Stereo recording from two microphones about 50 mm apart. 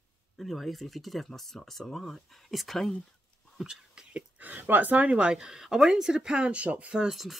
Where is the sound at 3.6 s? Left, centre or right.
Centre.